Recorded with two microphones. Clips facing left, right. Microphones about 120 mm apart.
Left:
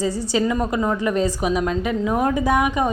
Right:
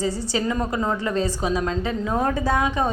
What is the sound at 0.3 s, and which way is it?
A woman's voice, 15° left (ahead or behind).